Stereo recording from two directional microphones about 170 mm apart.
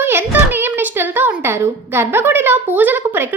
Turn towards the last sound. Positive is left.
turn(degrees=-10)  # may be behind; listen again after turning